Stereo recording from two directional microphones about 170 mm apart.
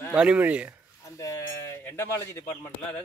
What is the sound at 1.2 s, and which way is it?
Speech, 15° left (ahead or behind).